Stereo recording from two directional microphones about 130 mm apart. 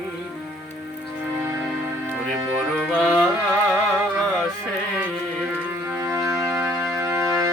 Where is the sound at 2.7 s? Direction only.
5° left (ahead or behind).